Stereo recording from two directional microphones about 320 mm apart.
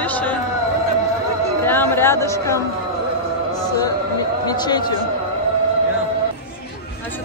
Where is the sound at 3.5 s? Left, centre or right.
Centre.